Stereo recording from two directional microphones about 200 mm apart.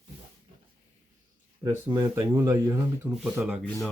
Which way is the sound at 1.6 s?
15° right (ahead or behind).